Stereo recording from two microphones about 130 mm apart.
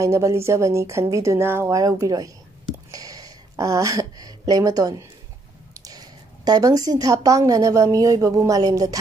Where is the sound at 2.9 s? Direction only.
30° right (ahead or behind).